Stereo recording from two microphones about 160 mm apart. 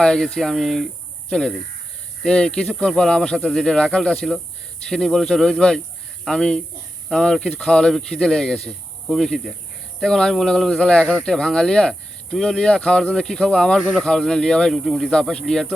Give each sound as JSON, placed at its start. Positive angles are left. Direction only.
{"t": 0.0, "sound": "speech", "side_deg": 5}